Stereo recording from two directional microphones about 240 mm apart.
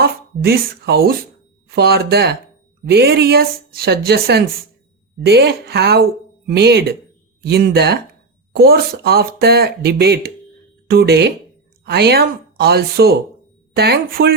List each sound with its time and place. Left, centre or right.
0.0 s speech: right